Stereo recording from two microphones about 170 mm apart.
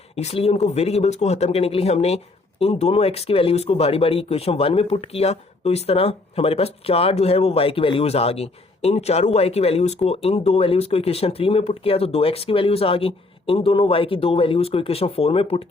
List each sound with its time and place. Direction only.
0.2 s speech: 40° left (ahead or behind)